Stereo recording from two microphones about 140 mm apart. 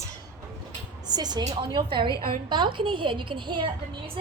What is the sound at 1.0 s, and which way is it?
A woman's voice, 30° right (ahead or behind).